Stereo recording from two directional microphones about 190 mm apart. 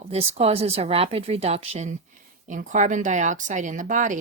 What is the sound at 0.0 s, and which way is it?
Speech, 30° right (ahead or behind).